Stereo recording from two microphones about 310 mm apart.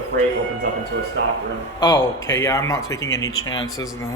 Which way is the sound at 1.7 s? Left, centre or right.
Centre.